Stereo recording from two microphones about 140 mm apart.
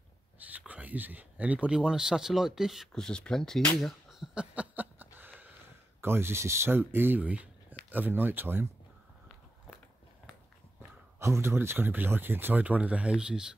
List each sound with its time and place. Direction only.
0.4 s speech: 10° right (ahead or behind)
10.8 s speech: 20° right (ahead or behind)